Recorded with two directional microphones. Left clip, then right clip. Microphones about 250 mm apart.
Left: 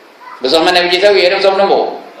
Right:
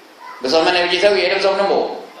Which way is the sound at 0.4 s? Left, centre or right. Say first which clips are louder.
Left 5 dB; centre.